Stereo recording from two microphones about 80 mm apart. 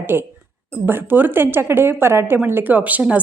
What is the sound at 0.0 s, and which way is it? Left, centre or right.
A woman's voice, right.